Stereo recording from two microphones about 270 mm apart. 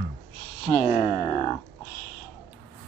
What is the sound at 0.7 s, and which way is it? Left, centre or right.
Speech, centre.